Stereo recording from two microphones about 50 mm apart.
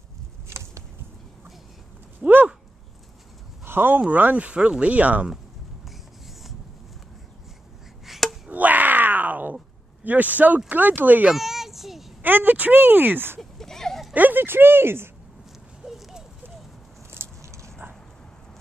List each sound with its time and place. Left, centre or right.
0.5 s a sound: right
2.2 s a sound: centre
3.6 s speech: right
4.1 s speech: right
8.0 s chop: centre
8.5 s grunt: right
10.0 s speech: right
11.3 s a sound: centre
12.2 s speech: right
13.4 s a sound: centre
14.1 s speech: right
15.8 s dog: centre
17.4 s dog: right